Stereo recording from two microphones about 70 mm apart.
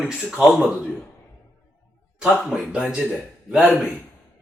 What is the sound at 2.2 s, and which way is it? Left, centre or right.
Speech, centre.